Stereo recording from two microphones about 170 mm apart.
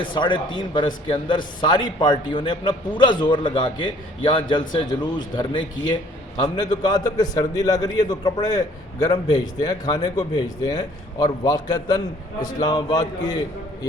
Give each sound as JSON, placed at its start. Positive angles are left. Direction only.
{"t": 0.0, "sound": "a man's voice", "side_deg": 30}